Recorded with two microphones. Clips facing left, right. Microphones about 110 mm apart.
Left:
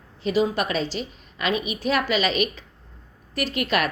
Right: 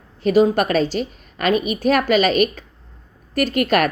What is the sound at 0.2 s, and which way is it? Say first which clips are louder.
A woman's voice: right 7 dB; 50° right (ahead or behind).